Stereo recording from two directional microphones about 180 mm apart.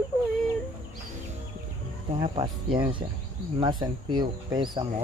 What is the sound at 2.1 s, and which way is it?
Speech, 25° right (ahead or behind).